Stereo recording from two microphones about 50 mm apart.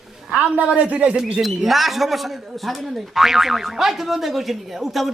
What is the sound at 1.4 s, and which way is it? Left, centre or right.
A man's voice, centre.